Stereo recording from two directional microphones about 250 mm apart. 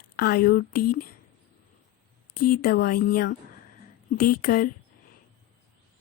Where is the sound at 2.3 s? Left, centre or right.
Left.